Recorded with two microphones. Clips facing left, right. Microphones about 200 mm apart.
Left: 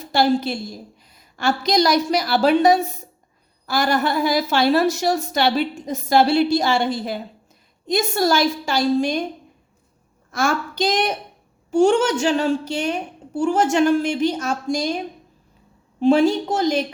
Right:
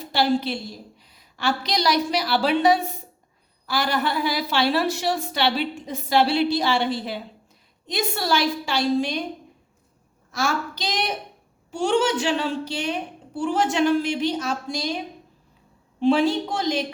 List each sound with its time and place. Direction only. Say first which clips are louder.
0.0 s a woman's voice: left 3 dB; 45° left (ahead or behind)
10.3 s a woman's voice: left 4 dB; 50° left (ahead or behind)